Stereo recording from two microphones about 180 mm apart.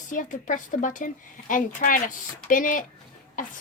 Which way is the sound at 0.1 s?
45° left (ahead or behind).